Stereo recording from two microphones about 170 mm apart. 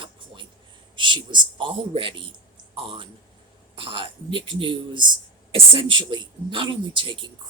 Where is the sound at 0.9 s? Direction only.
25° right (ahead or behind).